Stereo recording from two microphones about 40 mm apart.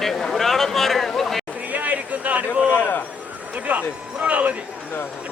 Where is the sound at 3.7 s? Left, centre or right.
Right.